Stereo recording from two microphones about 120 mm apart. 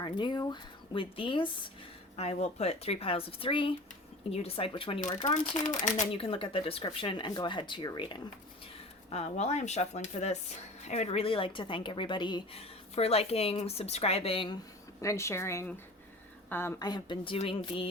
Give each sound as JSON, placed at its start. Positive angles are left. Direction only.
{"t": 0.0, "sound": "speech", "side_deg": 40}
{"t": 2.1, "sound": "speech", "side_deg": 65}
{"t": 6.1, "sound": "speech", "side_deg": 50}
{"t": 9.0, "sound": "speech", "side_deg": 60}
{"t": 12.5, "sound": "speech", "side_deg": 55}
{"t": 15.0, "sound": "speech", "side_deg": 25}
{"t": 16.8, "sound": "speech", "side_deg": 40}
{"t": 17.3, "sound": "speech", "side_deg": 50}